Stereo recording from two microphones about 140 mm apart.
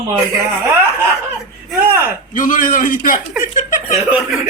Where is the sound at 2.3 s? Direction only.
70° left (ahead or behind).